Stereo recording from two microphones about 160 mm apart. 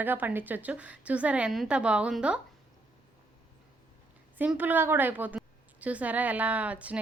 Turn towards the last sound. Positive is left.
turn(degrees=-10)  # may be behind; listen again after turning